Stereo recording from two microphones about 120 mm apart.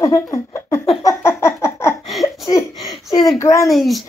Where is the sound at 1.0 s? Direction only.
20° left (ahead or behind).